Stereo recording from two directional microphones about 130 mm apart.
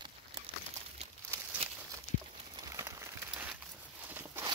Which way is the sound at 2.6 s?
25° right (ahead or behind).